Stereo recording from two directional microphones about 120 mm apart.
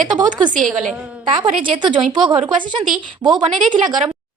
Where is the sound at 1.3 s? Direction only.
40° right (ahead or behind).